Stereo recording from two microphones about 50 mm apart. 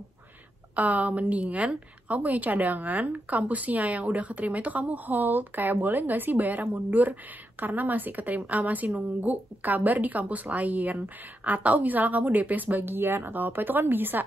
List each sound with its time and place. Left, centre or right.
0.7 s a woman's voice: right